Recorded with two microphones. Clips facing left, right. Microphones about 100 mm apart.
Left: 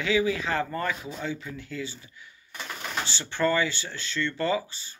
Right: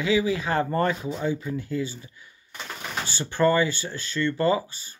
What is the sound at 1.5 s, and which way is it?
Speech, 40° right (ahead or behind).